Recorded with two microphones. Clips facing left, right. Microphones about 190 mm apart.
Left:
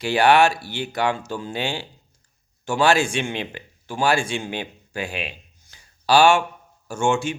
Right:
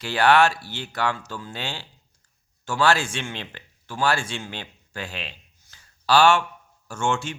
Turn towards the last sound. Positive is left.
turn(degrees=10)  # may be behind; listen again after turning